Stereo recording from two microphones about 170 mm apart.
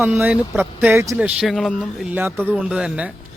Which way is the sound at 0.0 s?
10° right (ahead or behind).